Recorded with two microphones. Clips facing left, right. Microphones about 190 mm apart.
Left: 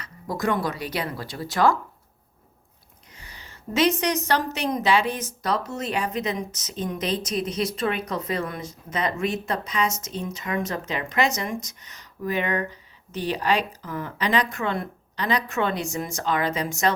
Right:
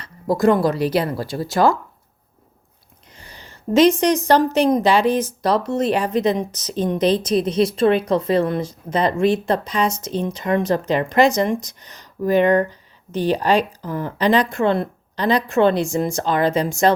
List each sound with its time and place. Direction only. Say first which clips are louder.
0.0 s a woman's voice: right 10 dB; 30° right (ahead or behind)
3.1 s a sound: right 4 dB; 30° right (ahead or behind)
4.3 s a woman's voice: right 9 dB; 30° right (ahead or behind)